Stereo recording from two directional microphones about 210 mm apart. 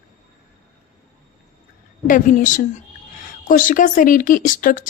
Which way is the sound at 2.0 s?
40° left (ahead or behind).